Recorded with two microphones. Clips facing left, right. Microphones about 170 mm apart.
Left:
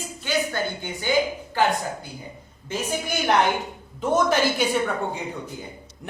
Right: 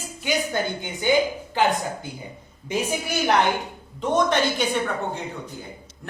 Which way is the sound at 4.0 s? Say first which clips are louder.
Even; 5° left (ahead or behind).